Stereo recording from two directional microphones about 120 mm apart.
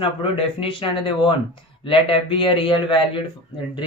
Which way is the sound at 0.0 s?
50° left (ahead or behind).